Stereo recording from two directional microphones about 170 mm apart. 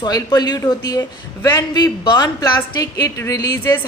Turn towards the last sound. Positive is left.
turn(degrees=20)  # may be behind; listen again after turning